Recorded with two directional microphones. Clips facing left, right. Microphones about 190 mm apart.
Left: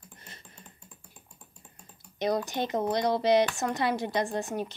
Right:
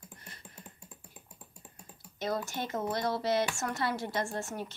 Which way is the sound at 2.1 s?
15° left (ahead or behind).